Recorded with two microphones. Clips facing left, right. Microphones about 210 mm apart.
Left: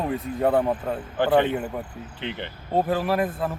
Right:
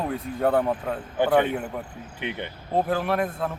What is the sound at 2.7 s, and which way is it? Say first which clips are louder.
Speech: left 1 dB; centre (ahead or behind).